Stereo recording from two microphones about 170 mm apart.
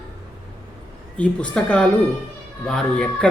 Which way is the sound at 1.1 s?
5° left (ahead or behind).